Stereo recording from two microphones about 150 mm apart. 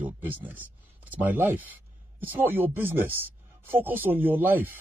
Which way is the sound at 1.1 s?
15° right (ahead or behind).